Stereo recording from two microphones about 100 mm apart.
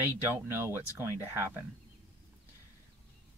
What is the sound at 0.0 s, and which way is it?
Speech, 20° right (ahead or behind).